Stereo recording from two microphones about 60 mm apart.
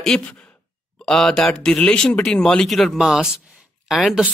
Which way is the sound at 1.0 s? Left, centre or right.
Centre.